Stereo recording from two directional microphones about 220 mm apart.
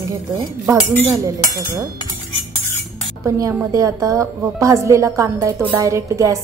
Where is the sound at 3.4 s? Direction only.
15° right (ahead or behind).